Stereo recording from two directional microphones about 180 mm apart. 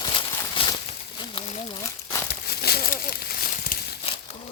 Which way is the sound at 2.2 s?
60° left (ahead or behind).